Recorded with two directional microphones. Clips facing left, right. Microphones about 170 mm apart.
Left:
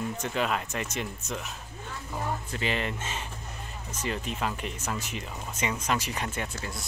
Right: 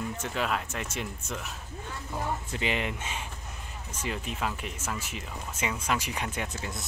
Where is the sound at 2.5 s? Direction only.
15° right (ahead or behind).